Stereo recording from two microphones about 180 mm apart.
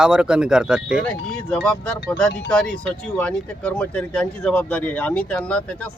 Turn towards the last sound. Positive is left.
turn(degrees=5)  # may be behind; listen again after turning